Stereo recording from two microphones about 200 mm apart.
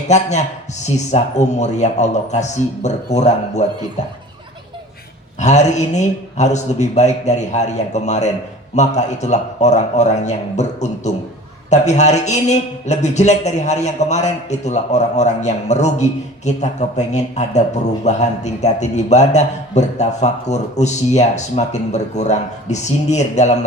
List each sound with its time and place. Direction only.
0.1 s a man's voice: 35° left (ahead or behind)
5.4 s a man's voice: 35° left (ahead or behind)